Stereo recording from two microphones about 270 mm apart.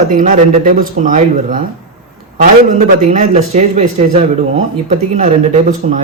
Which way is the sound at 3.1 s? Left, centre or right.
Right.